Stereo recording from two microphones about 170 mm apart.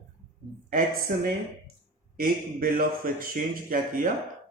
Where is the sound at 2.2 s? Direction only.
55° right (ahead or behind).